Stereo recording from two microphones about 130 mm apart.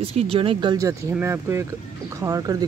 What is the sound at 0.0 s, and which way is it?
Speech, 50° right (ahead or behind).